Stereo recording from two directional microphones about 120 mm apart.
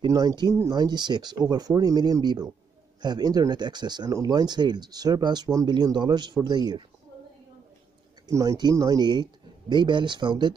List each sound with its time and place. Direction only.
0.0 s speech: 30° right (ahead or behind)
8.3 s speech: 30° right (ahead or behind)